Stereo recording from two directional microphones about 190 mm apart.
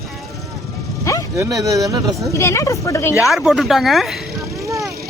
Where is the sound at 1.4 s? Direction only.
15° right (ahead or behind).